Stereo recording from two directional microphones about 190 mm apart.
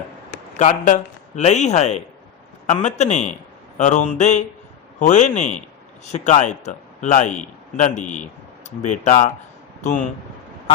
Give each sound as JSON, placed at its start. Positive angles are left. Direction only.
{"t": 0.6, "sound": "a man's voice", "side_deg": 40}